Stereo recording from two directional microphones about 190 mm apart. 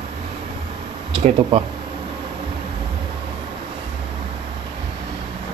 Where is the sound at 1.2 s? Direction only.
30° right (ahead or behind).